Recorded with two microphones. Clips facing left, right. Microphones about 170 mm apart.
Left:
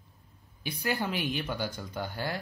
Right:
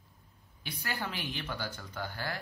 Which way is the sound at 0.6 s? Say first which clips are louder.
Left 7 dB; 15° left (ahead or behind).